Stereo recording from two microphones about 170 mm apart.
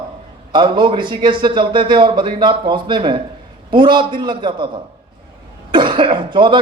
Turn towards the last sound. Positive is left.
turn(degrees=-30)  # may be behind; listen again after turning